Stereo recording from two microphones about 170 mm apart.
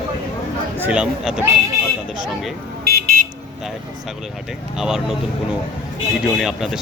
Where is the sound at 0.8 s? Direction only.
5° right (ahead or behind).